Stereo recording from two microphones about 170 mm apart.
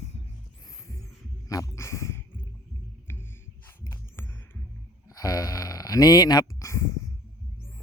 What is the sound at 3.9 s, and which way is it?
Music, 15° left (ahead or behind).